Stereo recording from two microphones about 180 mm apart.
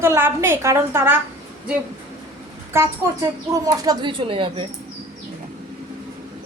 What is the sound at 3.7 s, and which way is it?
Speech, 20° right (ahead or behind).